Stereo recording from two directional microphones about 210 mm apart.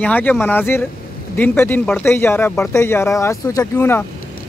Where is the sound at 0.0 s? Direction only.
5° left (ahead or behind).